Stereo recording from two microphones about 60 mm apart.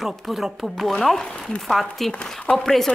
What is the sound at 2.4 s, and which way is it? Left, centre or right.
Speech, centre.